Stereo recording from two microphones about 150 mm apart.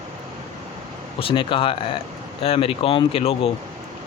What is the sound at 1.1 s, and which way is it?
Speech, 35° left (ahead or behind).